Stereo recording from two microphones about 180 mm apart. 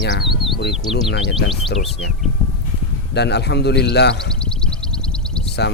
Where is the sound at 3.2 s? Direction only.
70° left (ahead or behind).